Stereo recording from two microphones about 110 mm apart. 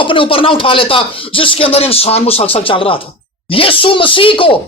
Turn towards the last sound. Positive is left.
turn(degrees=55)  # may be behind; listen again after turning